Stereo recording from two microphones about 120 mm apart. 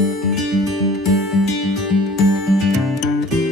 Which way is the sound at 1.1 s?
Centre (ahead or behind).